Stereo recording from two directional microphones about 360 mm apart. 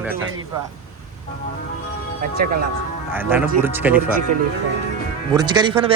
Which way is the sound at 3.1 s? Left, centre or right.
Centre.